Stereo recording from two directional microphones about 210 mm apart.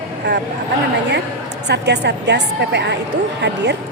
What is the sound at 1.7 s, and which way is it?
Speech, 55° right (ahead or behind).